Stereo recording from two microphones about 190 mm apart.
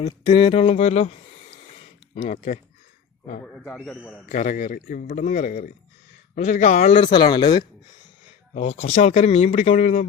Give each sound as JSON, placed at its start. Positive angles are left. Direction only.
{"t": 0.0, "sound": "a man's voice", "side_deg": 25}
{"t": 3.4, "sound": "a man's voice", "side_deg": 10}
{"t": 4.3, "sound": "a man's voice", "side_deg": 40}
{"t": 7.1, "sound": "speech", "side_deg": 25}
{"t": 8.5, "sound": "a man's voice", "side_deg": 35}